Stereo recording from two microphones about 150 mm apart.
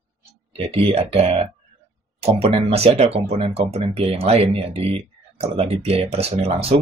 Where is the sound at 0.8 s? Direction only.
40° right (ahead or behind).